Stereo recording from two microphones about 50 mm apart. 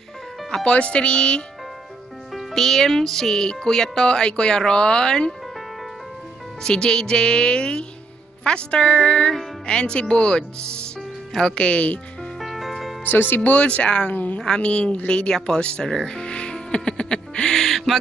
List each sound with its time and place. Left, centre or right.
0.7 s speech: left
2.3 s speech: centre
6.6 s speech: centre
12.4 s music: centre
13.0 s speech: left
14.4 s a woman's voice: centre
15.0 s music: centre